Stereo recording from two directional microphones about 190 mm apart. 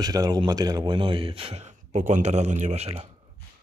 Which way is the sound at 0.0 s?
20° right (ahead or behind).